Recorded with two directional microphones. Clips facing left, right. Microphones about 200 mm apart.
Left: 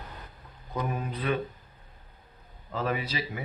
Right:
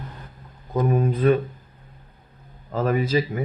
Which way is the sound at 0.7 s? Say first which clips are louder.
Right 11 dB; 45° right (ahead or behind).